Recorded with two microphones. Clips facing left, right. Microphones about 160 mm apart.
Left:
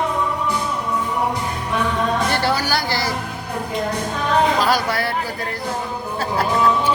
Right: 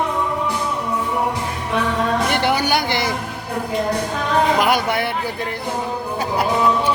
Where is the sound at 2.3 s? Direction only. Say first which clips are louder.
Right 2 dB; 20° right (ahead or behind).